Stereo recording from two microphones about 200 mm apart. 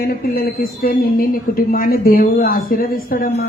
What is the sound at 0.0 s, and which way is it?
Speech, 50° left (ahead or behind).